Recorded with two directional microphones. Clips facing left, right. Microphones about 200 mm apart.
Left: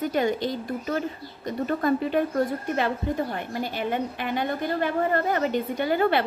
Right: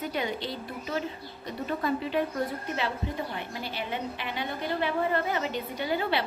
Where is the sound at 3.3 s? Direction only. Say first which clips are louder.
Left 5 dB; 50° left (ahead or behind).